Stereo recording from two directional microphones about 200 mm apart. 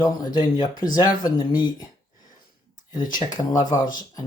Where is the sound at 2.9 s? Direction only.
40° left (ahead or behind).